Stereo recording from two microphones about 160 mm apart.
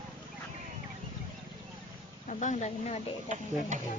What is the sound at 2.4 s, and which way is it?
Speech, 50° left (ahead or behind).